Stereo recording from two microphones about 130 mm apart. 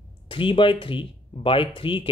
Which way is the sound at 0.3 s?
40° left (ahead or behind).